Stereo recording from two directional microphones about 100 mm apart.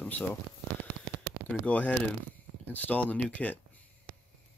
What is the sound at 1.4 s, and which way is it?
Speech, 15° left (ahead or behind).